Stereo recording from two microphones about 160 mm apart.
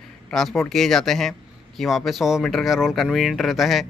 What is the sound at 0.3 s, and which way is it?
A man's voice, centre (ahead or behind).